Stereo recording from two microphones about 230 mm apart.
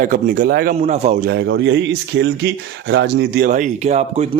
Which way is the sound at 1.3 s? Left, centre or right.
Right.